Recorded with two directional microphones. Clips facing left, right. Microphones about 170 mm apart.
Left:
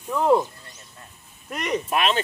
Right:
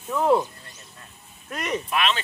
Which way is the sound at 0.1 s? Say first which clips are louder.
Left 1 dB; centre (ahead or behind).